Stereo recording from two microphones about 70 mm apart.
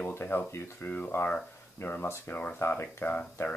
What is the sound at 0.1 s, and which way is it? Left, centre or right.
Speech, left.